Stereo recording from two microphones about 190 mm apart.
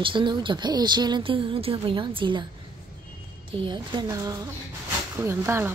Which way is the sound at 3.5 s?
25° right (ahead or behind).